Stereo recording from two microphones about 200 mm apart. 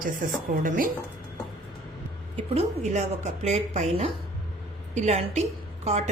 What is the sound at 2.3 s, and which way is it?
A woman's voice, 35° right (ahead or behind).